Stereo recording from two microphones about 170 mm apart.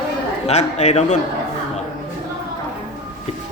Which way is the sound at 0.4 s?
40° left (ahead or behind).